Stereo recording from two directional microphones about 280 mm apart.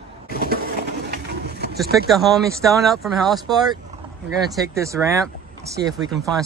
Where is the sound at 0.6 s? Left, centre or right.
Right.